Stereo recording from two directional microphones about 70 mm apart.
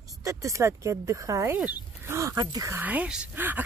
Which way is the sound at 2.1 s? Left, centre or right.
Right.